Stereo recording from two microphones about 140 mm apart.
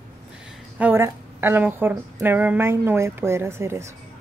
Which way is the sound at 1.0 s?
15° right (ahead or behind).